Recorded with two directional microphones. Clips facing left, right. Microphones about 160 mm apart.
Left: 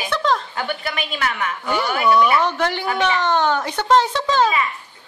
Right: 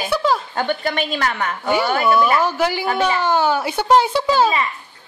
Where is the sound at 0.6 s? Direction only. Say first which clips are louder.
Right 5 dB; 35° right (ahead or behind).